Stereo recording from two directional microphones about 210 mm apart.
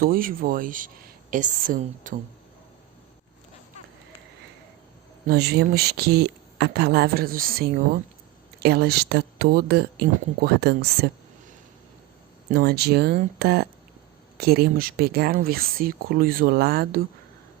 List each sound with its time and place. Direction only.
0.0 s speech: 45° right (ahead or behind)
5.3 s speech: 50° right (ahead or behind)
12.5 s speech: 50° right (ahead or behind)